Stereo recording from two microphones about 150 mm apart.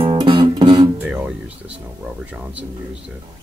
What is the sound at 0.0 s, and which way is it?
Guitar, 35° right (ahead or behind).